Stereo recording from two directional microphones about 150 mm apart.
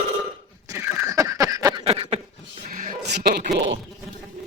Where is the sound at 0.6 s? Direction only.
20° right (ahead or behind).